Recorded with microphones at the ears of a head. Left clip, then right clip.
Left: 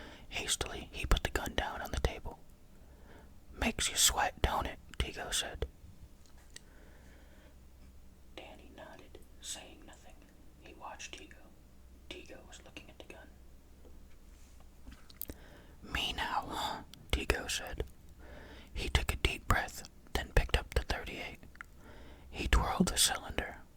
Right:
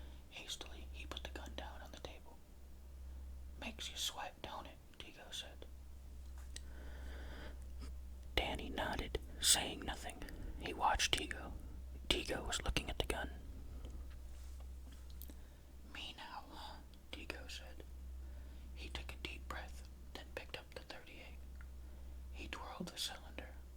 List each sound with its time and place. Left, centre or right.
0.0 s whispering: left
3.1 s speech: left
7.2 s wheeze: right
8.4 s whispering: right
12.0 s speech: right
15.8 s whispering: left